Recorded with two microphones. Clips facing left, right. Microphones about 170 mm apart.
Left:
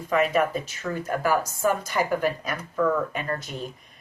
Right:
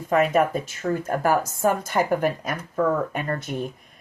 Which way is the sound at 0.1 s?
50° right (ahead or behind).